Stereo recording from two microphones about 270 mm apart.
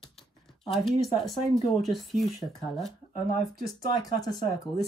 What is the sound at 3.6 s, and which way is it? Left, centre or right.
Speech, centre.